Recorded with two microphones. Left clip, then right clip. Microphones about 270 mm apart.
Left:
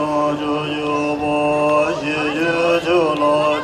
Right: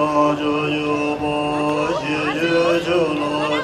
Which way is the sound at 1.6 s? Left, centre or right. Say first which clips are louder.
Left 4 dB; centre.